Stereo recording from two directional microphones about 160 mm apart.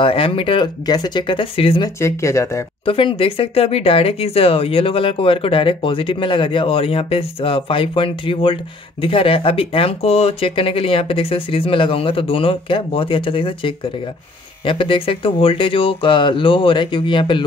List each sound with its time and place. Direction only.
0.0 s speech: 35° left (ahead or behind)
2.0 s speech: 15° left (ahead or behind)
2.8 s speech: 35° left (ahead or behind)